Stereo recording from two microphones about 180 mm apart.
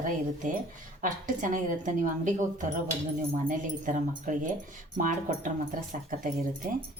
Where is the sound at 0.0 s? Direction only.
45° right (ahead or behind).